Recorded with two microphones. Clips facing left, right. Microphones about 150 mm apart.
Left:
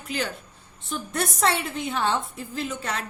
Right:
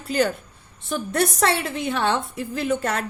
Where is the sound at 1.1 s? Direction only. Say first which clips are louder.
Right 3 dB; 75° right (ahead or behind).